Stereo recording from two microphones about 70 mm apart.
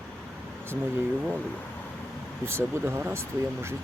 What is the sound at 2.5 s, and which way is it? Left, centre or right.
Speech, right.